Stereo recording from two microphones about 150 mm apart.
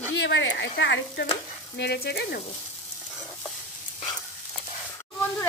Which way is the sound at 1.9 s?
90° left.